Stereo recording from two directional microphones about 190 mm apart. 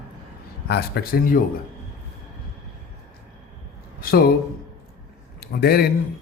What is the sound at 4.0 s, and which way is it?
Speech, 50° left (ahead or behind).